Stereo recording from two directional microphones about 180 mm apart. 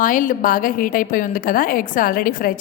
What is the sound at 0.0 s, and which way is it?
A woman's voice, 50° left (ahead or behind).